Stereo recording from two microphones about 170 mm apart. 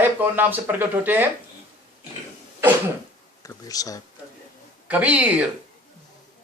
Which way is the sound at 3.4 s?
20° left (ahead or behind).